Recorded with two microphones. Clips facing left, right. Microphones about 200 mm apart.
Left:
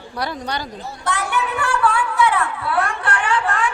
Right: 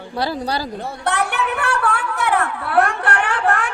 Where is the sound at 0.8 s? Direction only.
65° right (ahead or behind).